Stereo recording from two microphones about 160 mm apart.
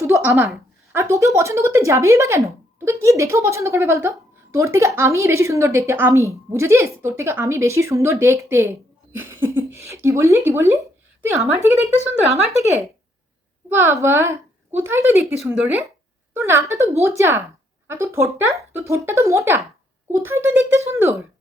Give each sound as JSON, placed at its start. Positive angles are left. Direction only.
{"t": 0.0, "sound": "a sound", "side_deg": -15}
{"t": 0.9, "sound": "a woman's voice", "side_deg": -20}
{"t": 13.7, "sound": "a woman's voice", "side_deg": -15}
{"t": 15.2, "sound": "speech", "side_deg": 0}
{"t": 16.3, "sound": "a woman's voice", "side_deg": -15}